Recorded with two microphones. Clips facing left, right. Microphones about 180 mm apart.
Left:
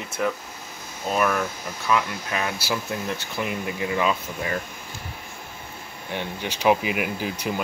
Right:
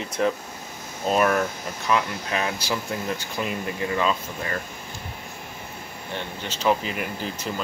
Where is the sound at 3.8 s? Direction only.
10° left (ahead or behind).